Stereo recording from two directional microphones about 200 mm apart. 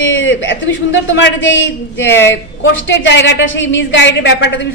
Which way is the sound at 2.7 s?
65° left (ahead or behind).